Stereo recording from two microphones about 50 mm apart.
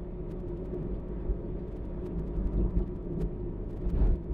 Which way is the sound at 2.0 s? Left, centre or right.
Centre.